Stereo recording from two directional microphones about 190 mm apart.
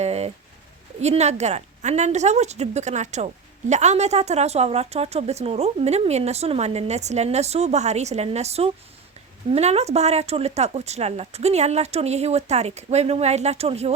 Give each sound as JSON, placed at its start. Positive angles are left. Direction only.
{"t": 0.0, "sound": "bird", "side_deg": -35}
{"t": 1.0, "sound": "a woman's voice", "side_deg": -35}